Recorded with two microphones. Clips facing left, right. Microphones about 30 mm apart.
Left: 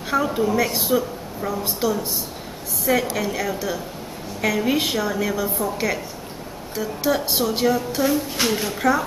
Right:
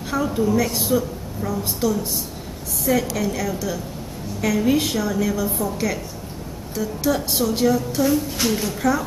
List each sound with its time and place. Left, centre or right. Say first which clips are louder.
0.1 s a woman's voice: even; centre
3.2 s a woman's voice: even; centre